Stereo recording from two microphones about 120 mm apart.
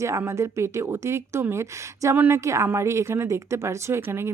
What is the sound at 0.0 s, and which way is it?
A woman's voice, 25° right (ahead or behind).